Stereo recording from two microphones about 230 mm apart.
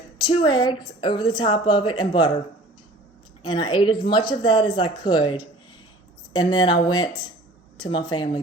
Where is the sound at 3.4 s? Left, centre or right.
Centre.